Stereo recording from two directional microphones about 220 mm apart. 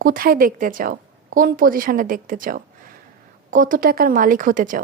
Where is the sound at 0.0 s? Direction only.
40° right (ahead or behind).